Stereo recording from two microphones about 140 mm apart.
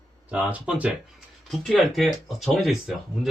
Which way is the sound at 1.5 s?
Centre (ahead or behind).